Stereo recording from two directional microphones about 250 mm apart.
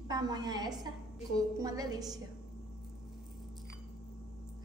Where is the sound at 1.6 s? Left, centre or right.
Centre.